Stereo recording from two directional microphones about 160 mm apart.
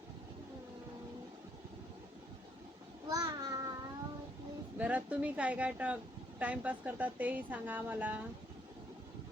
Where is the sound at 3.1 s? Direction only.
25° right (ahead or behind).